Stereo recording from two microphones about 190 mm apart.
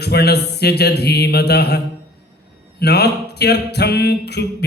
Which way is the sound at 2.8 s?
60° left (ahead or behind).